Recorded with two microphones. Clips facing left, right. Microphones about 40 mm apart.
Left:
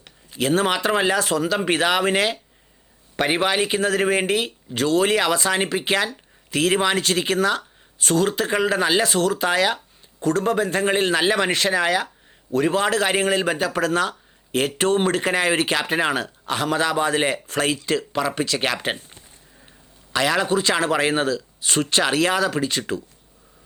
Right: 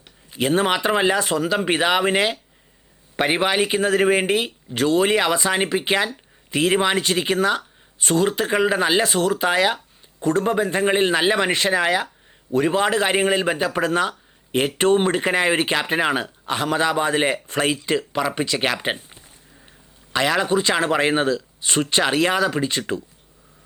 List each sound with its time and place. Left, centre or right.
0.3 s speech: centre
4.7 s speech: right
20.1 s speech: centre